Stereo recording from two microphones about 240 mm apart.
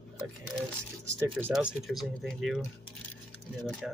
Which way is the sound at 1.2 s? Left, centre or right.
Centre.